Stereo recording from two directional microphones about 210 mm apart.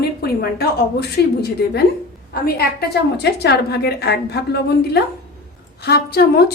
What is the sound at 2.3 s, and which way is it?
A woman's voice, 45° left (ahead or behind).